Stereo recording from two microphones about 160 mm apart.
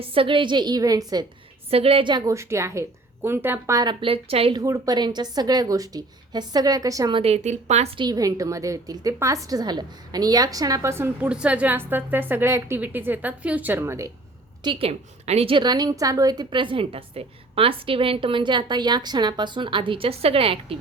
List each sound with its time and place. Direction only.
0.0 s a woman's voice: 35° right (ahead or behind)
1.7 s a woman's voice: 35° right (ahead or behind); by 3.9 s 20° right (ahead or behind)
4.0 s a woman's voice: 35° right (ahead or behind)
4.5 s a woman's voice: 20° right (ahead or behind)
7.2 s a woman's voice: 40° right (ahead or behind); by 14.1 s 15° right (ahead or behind)
14.6 s a woman's voice: 35° right (ahead or behind)